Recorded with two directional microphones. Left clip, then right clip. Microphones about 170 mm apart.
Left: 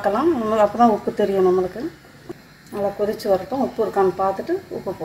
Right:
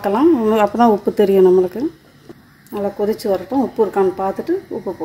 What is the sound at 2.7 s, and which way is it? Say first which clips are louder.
Speech: right 3 dB; 45° right (ahead or behind).